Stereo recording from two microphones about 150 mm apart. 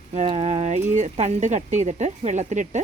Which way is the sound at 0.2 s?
45° right (ahead or behind).